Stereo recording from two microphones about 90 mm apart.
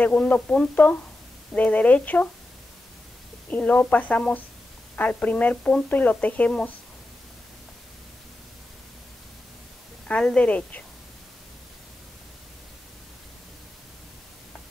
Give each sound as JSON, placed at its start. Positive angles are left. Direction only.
{"t": 0.0, "sound": "speech", "side_deg": 15}
{"t": 3.4, "sound": "speech", "side_deg": 15}
{"t": 10.0, "sound": "speech", "side_deg": 10}